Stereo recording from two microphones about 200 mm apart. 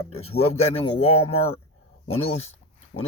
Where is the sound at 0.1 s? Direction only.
30° left (ahead or behind).